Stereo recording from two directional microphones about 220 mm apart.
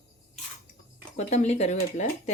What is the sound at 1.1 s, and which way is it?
Speech, 30° left (ahead or behind).